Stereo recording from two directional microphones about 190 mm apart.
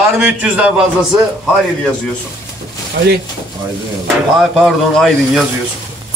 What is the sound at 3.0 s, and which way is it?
Speech, 65° right (ahead or behind).